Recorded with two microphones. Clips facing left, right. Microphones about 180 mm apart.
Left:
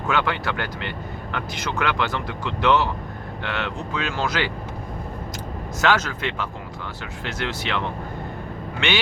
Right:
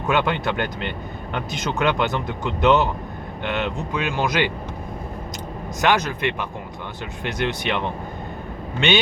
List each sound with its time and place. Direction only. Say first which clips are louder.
0.1 s speech: right 3 dB; 20° right (ahead or behind)
5.8 s speech: right 2 dB; 15° right (ahead or behind)